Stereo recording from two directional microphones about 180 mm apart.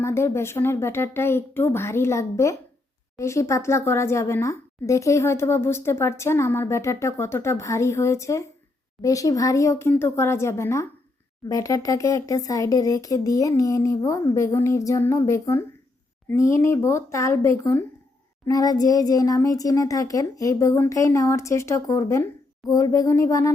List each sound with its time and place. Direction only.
0.0 s a woman's voice: 15° left (ahead or behind)